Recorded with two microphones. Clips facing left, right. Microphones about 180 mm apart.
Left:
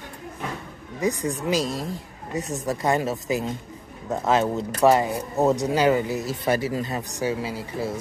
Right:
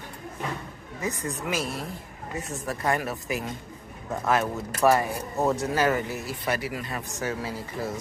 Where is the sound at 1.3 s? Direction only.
35° left (ahead or behind).